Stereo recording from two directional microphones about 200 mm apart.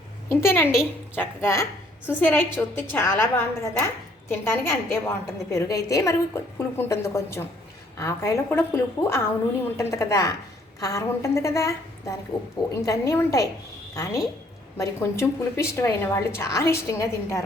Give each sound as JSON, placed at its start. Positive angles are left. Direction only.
{"t": 0.3, "sound": "a woman's voice", "side_deg": 10}